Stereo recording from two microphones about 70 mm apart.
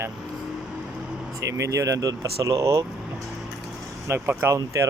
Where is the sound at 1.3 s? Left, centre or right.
Right.